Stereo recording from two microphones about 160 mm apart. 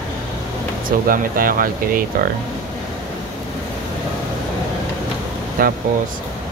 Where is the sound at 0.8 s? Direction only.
60° right (ahead or behind).